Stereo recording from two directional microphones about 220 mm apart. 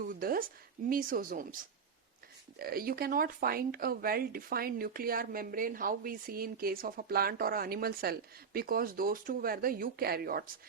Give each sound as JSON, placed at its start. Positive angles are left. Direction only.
{"t": 0.0, "sound": "a woman's voice", "side_deg": -40}
{"t": 2.6, "sound": "speech", "side_deg": -40}